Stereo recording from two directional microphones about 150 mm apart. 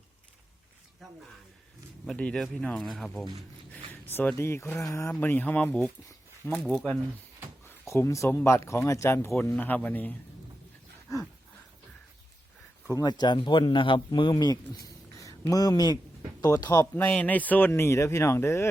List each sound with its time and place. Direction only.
2.0 s speech: 5° left (ahead or behind)
7.9 s speech: 20° left (ahead or behind)
12.9 s speech: 25° left (ahead or behind)
16.9 s speech: 10° left (ahead or behind)